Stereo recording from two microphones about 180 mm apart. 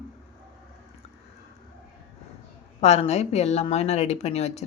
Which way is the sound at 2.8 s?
35° left (ahead or behind).